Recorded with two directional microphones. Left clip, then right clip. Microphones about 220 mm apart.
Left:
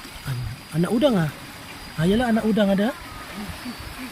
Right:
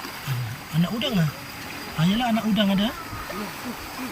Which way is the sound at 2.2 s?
20° left (ahead or behind).